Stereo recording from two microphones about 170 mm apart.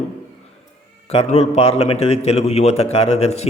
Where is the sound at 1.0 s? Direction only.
35° left (ahead or behind).